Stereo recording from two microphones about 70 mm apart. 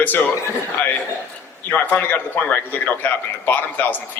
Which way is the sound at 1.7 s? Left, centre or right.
Left.